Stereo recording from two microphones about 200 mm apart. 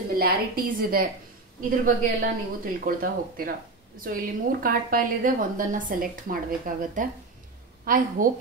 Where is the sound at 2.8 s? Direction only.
45° right (ahead or behind).